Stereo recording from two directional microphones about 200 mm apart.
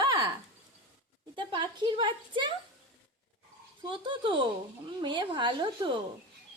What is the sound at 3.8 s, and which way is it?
A woman's voice, 25° right (ahead or behind).